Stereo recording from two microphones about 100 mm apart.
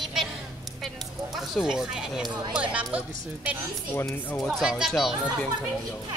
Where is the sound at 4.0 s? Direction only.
30° left (ahead or behind).